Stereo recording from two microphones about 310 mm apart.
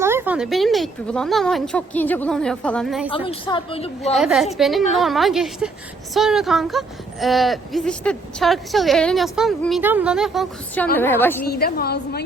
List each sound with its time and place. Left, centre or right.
0.0 s speech: centre
3.1 s a woman's voice: centre
4.1 s a woman's voice: centre
11.4 s a woman's voice: left